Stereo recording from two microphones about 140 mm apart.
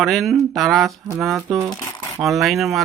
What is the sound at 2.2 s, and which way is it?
Speech, centre (ahead or behind).